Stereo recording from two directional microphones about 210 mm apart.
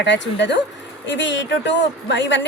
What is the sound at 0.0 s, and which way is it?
A woman's voice, 60° left (ahead or behind).